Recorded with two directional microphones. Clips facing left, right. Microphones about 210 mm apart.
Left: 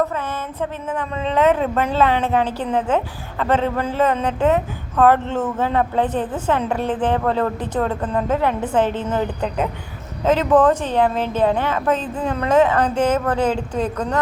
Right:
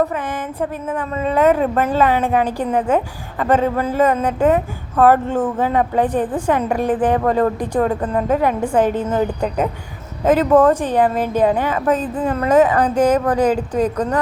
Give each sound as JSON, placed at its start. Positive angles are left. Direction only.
{"t": 0.0, "sound": "a woman's voice", "side_deg": -15}
{"t": 12.9, "sound": "speech", "side_deg": -40}
{"t": 13.1, "sound": "a woman's voice", "side_deg": -15}